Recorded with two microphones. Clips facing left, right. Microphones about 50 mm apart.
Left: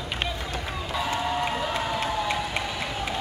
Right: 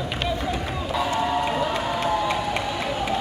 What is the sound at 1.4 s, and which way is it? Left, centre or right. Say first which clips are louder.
Crowd: right 3 dB; centre.